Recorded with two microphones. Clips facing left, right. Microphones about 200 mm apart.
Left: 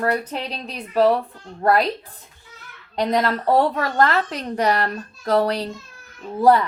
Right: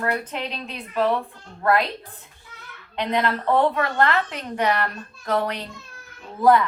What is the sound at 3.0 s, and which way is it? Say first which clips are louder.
A woman's voice: left 3 dB; 40° left (ahead or behind).